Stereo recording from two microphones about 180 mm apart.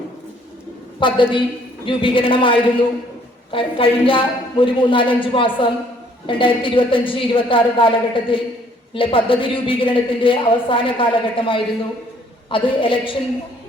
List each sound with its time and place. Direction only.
0.9 s a woman's voice: 25° left (ahead or behind)